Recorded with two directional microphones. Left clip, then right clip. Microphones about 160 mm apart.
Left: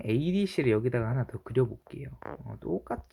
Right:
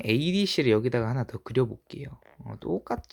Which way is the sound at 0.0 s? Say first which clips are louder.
Right 4 dB; 25° right (ahead or behind).